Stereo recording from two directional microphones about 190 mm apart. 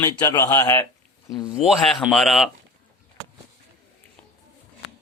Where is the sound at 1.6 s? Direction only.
Centre (ahead or behind).